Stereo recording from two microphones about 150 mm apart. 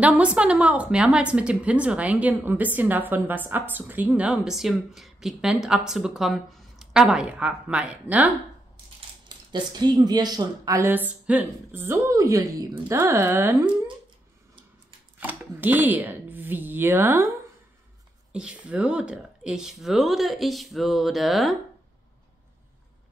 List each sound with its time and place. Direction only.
0.0 s a woman's voice: 5° right (ahead or behind)
9.5 s a woman's voice: 30° right (ahead or behind)
15.1 s speech: 10° right (ahead or behind)
18.3 s speech: 5° right (ahead or behind)